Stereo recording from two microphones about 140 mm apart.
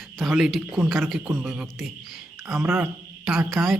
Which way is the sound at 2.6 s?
15° right (ahead or behind).